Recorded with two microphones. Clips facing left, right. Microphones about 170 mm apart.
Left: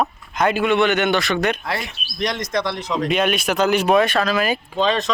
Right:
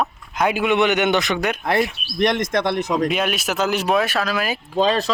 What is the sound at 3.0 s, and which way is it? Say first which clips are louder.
Speech: left 2 dB; 5° right (ahead or behind).